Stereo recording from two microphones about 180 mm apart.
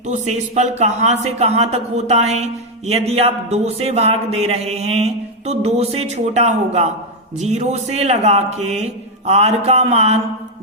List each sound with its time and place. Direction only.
0.1 s a man's voice: 40° right (ahead or behind)